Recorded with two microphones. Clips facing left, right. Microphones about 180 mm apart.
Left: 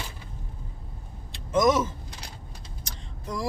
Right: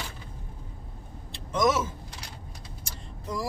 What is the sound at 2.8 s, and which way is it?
Vehicle, 5° right (ahead or behind).